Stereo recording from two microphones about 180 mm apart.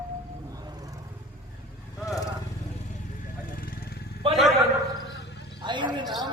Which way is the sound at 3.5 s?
55° left (ahead or behind).